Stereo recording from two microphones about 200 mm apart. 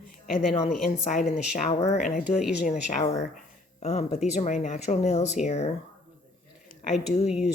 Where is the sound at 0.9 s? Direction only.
40° left (ahead or behind).